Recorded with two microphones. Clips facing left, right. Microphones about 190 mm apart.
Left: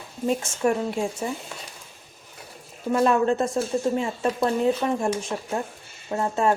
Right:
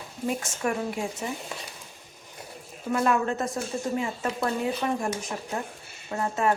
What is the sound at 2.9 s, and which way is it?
Speech, 30° left (ahead or behind).